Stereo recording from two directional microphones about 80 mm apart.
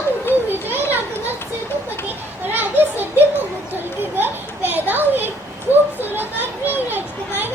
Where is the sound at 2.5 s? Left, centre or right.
Right.